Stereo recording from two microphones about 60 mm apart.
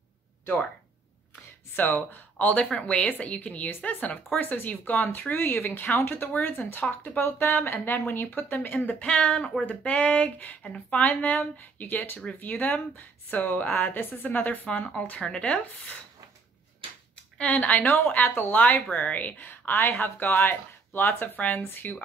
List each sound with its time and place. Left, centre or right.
1.8 s speech: left
17.6 s speech: left
18.6 s speech: left
21.5 s speech: left